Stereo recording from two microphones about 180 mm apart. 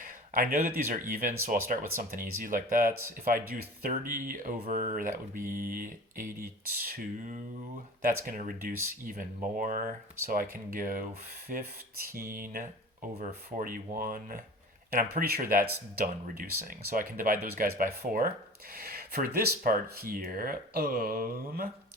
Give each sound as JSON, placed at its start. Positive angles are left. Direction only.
{"t": 0.0, "sound": "speech", "side_deg": -50}